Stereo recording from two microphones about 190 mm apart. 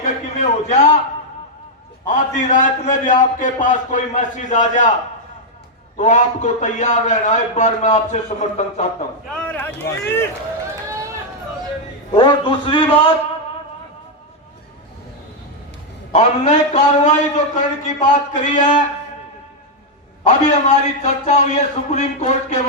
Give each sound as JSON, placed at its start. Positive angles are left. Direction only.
{"t": 0.0, "sound": "a sound", "side_deg": 40}
{"t": 2.0, "sound": "a man's voice", "side_deg": 40}
{"t": 6.0, "sound": "a man's voice", "side_deg": 40}
{"t": 9.3, "sound": "speech", "side_deg": 5}
{"t": 12.1, "sound": "a man's voice", "side_deg": 25}
{"t": 16.1, "sound": "a man's voice", "side_deg": 40}
{"t": 20.2, "sound": "a man's voice", "side_deg": 40}